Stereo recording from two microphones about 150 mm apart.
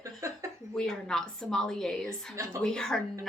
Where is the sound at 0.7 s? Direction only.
5° left (ahead or behind).